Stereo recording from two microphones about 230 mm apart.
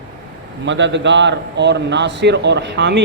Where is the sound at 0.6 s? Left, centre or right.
Right.